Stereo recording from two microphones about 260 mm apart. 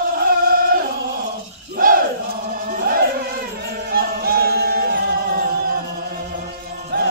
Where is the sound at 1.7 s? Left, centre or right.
Right.